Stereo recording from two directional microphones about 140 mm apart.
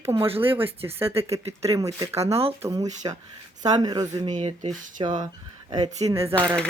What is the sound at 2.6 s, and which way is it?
Speech, 25° right (ahead or behind).